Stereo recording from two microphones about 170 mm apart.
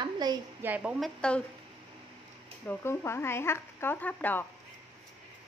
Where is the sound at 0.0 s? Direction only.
25° right (ahead or behind).